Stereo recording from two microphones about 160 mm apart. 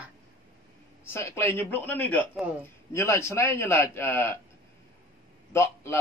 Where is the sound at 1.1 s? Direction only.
15° left (ahead or behind).